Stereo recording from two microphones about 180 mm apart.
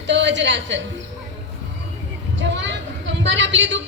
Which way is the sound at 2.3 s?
90° right.